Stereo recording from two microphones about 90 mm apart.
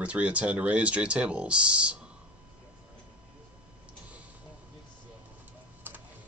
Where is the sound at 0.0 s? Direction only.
15° right (ahead or behind).